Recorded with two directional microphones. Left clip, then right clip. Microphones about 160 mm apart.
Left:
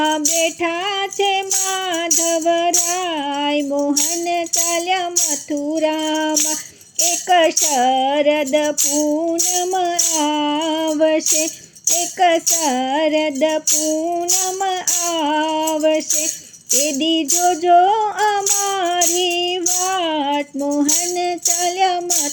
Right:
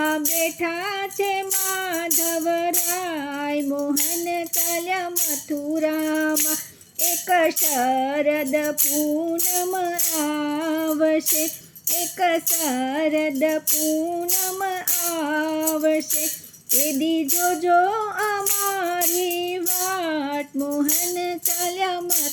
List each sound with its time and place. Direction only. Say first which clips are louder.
0.0 s music: left 5 dB; 30° left (ahead or behind)
2.0 s music: left 9 dB; 35° left (ahead or behind)
14.6 s music: left 6 dB; 30° left (ahead or behind)